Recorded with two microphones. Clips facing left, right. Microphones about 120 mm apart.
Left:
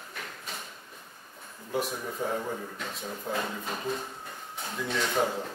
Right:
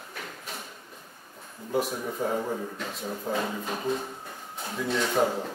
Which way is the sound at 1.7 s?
5° right (ahead or behind).